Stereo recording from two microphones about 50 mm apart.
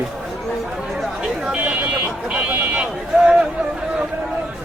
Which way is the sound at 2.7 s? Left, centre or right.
Right.